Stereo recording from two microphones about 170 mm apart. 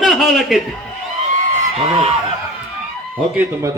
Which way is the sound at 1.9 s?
35° right (ahead or behind).